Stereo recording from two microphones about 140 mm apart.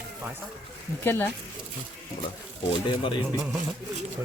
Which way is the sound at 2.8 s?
35° left (ahead or behind).